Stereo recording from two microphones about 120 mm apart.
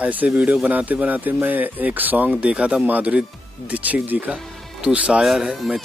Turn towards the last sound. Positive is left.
turn(degrees=0)  # may be behind; listen again after turning